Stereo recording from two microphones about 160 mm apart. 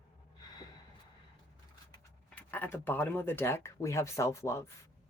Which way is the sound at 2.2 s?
10° left (ahead or behind).